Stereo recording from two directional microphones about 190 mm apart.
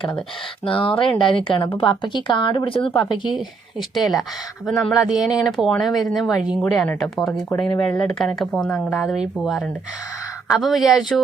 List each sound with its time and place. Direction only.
0.6 s speech: 25° left (ahead or behind)
3.2 s speech: centre (ahead or behind)